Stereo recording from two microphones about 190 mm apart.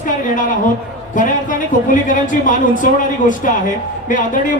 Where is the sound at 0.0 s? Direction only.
45° left (ahead or behind).